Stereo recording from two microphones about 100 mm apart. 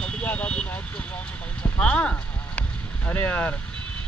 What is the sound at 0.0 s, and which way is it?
Vehicle, 15° left (ahead or behind).